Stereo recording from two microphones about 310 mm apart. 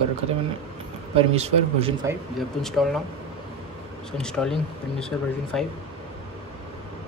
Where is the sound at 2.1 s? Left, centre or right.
Centre.